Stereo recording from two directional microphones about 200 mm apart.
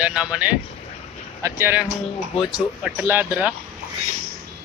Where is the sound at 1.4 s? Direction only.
15° right (ahead or behind).